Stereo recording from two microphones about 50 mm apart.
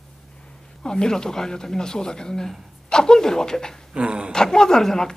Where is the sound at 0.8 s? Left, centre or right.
Centre.